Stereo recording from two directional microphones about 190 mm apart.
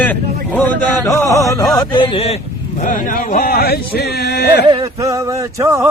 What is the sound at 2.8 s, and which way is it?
Speech, 45° left (ahead or behind).